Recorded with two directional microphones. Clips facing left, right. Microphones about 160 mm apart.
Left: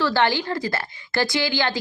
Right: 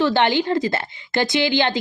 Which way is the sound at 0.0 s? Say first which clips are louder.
Right 3 dB; 20° right (ahead or behind).